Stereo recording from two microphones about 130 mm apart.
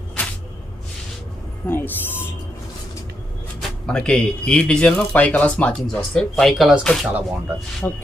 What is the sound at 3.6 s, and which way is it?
Speech, 5° left (ahead or behind).